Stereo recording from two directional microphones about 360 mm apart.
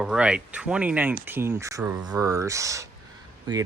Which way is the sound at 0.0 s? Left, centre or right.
Centre.